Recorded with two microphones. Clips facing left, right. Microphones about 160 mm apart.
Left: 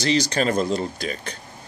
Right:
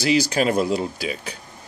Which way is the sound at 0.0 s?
5° right (ahead or behind).